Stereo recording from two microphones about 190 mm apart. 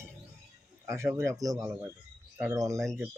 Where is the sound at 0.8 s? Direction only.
15° right (ahead or behind).